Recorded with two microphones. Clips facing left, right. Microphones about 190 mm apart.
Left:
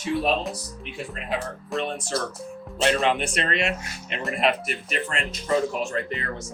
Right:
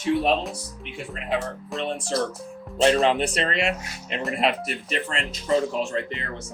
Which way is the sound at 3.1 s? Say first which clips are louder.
Right 1 dB; 35° right (ahead or behind).